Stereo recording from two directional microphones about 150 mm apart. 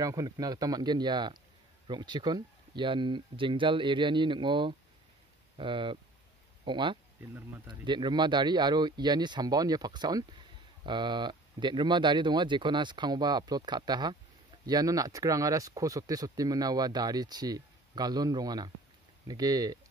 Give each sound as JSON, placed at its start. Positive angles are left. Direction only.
{"t": 0.0, "sound": "speech", "side_deg": -25}